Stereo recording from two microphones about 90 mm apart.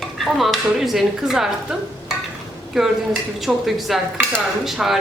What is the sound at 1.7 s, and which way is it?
Stir, 5° right (ahead or behind).